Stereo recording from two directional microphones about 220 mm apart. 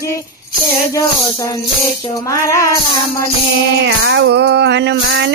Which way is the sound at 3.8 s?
55° right (ahead or behind).